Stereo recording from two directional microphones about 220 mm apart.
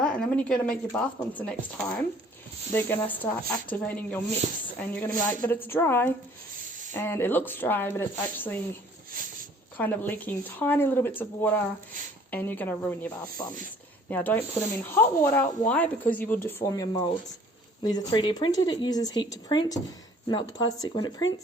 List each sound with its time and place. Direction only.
0.0 s speech: 5° left (ahead or behind)
9.7 s a woman's voice: 10° left (ahead or behind)